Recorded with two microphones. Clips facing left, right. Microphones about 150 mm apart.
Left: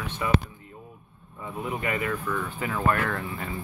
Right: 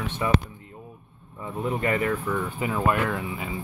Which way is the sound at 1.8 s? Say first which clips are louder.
Right 5 dB; 35° right (ahead or behind).